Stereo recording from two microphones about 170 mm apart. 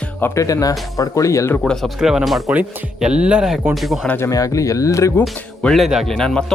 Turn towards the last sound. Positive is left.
turn(degrees=5)  # may be behind; listen again after turning